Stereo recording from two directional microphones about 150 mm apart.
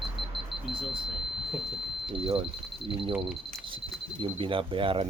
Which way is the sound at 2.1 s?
40° right (ahead or behind).